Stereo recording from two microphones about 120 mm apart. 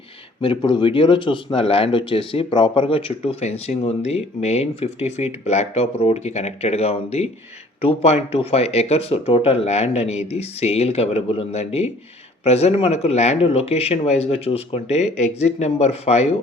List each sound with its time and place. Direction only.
0.4 s speech: 45° left (ahead or behind)